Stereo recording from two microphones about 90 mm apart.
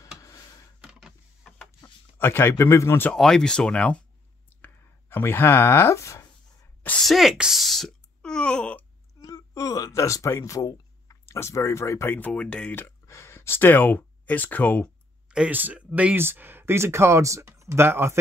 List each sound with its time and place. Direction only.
0.7 s power windows: 5° right (ahead or behind)
2.1 s speech: 25° left (ahead or behind)
3.1 s speech: 5° left (ahead or behind)
5.1 s speech: 25° left (ahead or behind)
7.0 s a sound: centre (ahead or behind)
9.2 s a sound: 40° left (ahead or behind)
12.2 s speech: 15° left (ahead or behind)
13.0 s speech: 30° left (ahead or behind)
15.2 s speech: 10° right (ahead or behind); by 18.1 s 25° right (ahead or behind)